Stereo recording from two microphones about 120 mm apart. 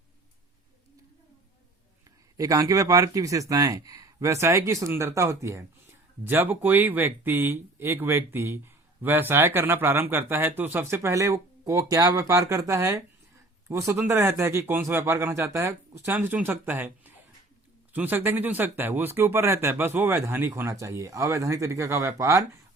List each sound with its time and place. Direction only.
2.4 s speech: 30° right (ahead or behind)
17.9 s speech: 15° right (ahead or behind)